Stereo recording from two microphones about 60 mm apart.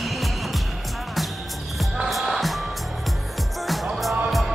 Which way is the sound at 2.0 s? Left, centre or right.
Centre.